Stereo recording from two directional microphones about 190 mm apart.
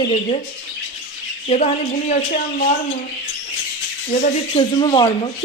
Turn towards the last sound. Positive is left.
turn(degrees=25)  # may be behind; listen again after turning